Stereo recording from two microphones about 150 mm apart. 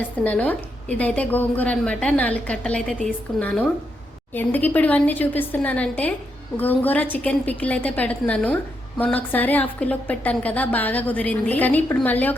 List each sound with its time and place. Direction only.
0.3 s a woman's voice: 10° left (ahead or behind)